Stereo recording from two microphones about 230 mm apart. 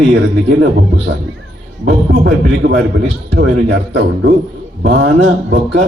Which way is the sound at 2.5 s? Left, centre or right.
Right.